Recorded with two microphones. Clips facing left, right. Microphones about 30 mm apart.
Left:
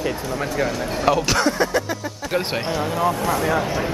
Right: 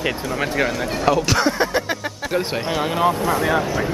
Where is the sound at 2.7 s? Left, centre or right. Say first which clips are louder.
Right 3 dB; right.